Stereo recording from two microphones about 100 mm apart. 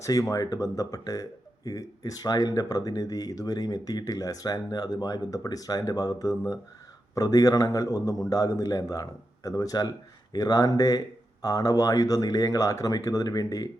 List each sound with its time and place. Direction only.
0.0 s speech: 35° left (ahead or behind)